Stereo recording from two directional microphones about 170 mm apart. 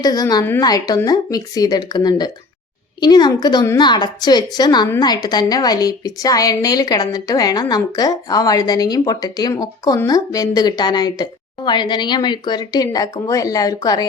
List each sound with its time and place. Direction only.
0.0 s a woman's voice: 25° left (ahead or behind)